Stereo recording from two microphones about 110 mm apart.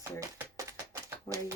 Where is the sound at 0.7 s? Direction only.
30° right (ahead or behind).